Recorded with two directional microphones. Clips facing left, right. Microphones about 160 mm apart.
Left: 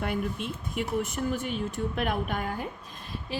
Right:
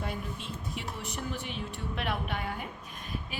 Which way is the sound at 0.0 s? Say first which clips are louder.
Left 7 dB; 60° left (ahead or behind).